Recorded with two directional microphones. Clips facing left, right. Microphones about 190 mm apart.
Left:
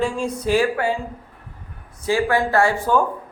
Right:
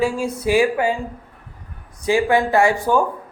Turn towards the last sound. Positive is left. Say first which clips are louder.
# right 2 dB
turn(degrees=-15)  # may be behind; listen again after turning